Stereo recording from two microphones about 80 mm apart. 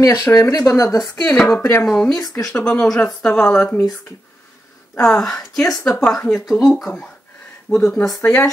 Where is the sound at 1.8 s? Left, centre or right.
Centre.